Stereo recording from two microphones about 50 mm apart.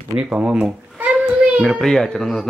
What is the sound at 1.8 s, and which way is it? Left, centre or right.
Speech, centre.